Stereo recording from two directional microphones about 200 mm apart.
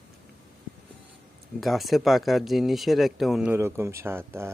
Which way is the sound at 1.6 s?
Centre (ahead or behind).